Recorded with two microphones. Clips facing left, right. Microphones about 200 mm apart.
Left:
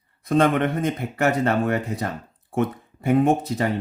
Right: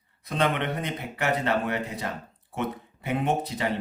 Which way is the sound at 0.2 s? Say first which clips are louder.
Left 8 dB; 45° left (ahead or behind).